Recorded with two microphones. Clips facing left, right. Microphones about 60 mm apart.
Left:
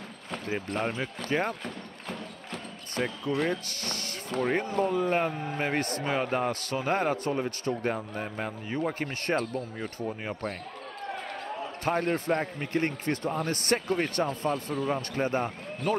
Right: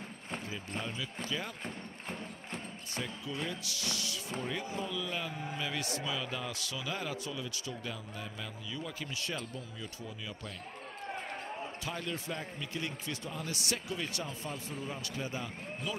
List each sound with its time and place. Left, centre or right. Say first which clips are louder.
0.7 s speech: left 8 dB; left
2.5 s a man's voice: left 7 dB; left
9.4 s speech: left 11 dB; left
9.8 s a man's voice: left 10 dB; left
11.8 s a man's voice: left 15 dB; left
14.5 s speech: left 11 dB; left
15.0 s a man's voice: left 10 dB; left